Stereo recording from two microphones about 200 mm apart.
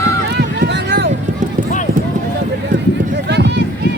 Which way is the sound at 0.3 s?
55° right (ahead or behind).